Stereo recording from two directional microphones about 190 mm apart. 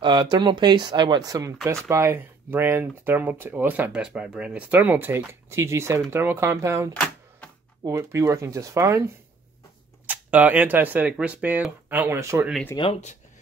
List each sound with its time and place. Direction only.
0.0 s speech: 25° right (ahead or behind)
7.0 s typewriter: 5° left (ahead or behind)
7.8 s speech: 15° right (ahead or behind)
12.7 s speech: 25° left (ahead or behind)